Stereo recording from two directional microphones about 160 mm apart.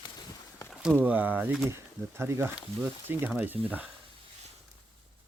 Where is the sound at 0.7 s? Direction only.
5° right (ahead or behind).